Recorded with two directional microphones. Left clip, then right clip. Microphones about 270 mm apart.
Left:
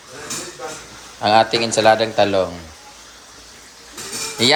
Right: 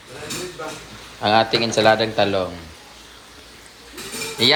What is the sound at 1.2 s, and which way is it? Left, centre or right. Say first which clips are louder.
Speech: left 2 dB; centre.